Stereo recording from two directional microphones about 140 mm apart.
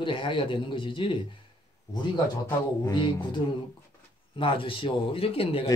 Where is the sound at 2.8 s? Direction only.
30° left (ahead or behind).